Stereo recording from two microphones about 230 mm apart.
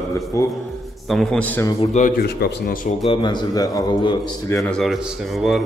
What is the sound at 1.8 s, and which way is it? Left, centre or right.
Speech, left.